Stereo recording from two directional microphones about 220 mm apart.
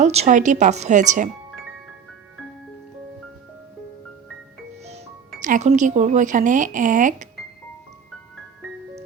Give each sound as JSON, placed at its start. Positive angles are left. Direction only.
{"t": 0.0, "sound": "speech", "side_deg": -30}
{"t": 5.4, "sound": "speech", "side_deg": -35}